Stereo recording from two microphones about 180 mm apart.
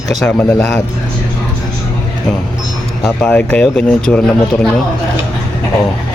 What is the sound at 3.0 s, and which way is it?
Speech, 10° left (ahead or behind).